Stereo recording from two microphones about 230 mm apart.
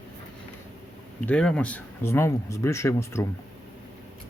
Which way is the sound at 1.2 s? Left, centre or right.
Centre.